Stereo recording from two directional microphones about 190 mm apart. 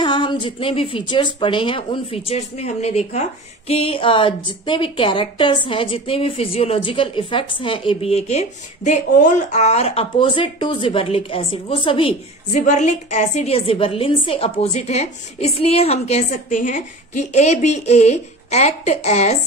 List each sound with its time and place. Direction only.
0.0 s a woman's voice: 25° left (ahead or behind)